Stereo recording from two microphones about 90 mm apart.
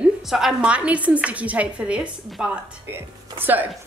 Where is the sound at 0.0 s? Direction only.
5° right (ahead or behind).